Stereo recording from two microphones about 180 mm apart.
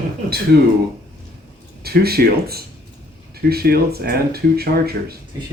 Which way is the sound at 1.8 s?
60° right (ahead or behind).